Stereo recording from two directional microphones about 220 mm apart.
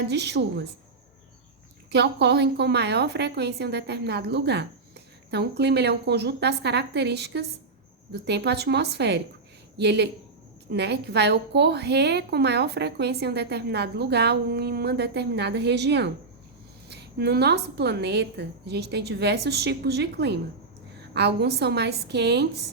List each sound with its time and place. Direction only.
0.0 s a woman's voice: 50° right (ahead or behind)
1.9 s a woman's voice: 50° right (ahead or behind)